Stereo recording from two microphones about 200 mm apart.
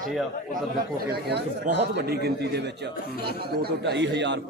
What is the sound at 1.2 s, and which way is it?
Speech, 55° right (ahead or behind).